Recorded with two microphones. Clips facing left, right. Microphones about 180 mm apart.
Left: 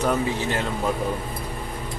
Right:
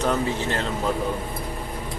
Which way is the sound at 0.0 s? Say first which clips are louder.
Even; 15° left (ahead or behind).